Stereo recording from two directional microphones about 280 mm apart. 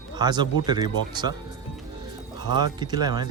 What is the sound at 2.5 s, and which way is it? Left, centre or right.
Speech, centre.